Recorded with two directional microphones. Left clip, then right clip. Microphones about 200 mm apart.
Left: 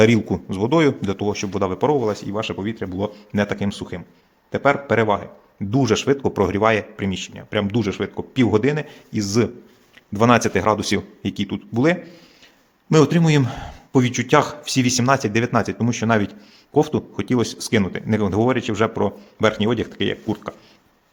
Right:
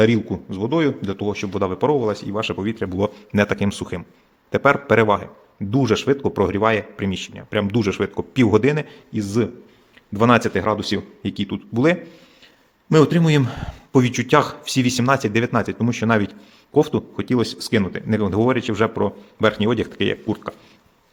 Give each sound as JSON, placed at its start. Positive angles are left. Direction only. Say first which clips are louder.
{"t": 0.0, "sound": "a man's voice", "louder": "left 2 dB", "side_deg": 20}
{"t": 5.7, "sound": "a man's voice", "louder": "even", "side_deg": 5}
{"t": 9.1, "sound": "a man's voice", "louder": "left 2 dB", "side_deg": 10}